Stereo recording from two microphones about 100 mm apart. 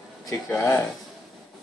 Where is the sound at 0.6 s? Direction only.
25° left (ahead or behind).